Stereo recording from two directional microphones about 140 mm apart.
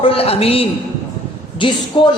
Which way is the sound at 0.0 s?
45° left (ahead or behind).